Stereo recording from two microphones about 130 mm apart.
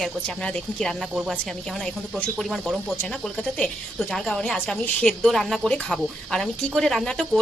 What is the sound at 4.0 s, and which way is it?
A woman's voice, centre (ahead or behind).